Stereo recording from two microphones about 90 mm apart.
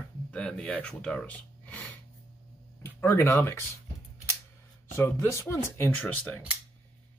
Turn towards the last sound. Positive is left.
turn(degrees=20)  # may be behind; listen again after turning